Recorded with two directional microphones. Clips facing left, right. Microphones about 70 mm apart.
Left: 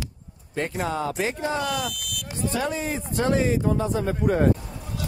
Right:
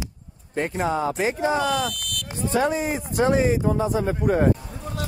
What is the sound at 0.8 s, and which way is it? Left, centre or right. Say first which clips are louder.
Speech: right 4 dB; centre.